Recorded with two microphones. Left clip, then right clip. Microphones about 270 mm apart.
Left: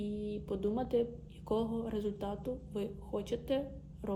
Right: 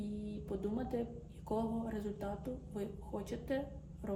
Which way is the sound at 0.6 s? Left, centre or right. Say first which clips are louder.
Left 7 dB; centre.